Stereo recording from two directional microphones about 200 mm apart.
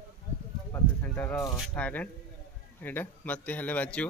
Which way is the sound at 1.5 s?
5° left (ahead or behind).